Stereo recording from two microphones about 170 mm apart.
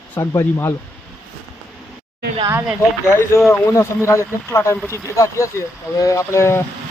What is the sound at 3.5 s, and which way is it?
Speech, 15° left (ahead or behind).